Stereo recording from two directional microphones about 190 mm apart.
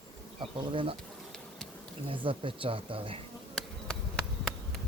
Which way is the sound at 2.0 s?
25° right (ahead or behind).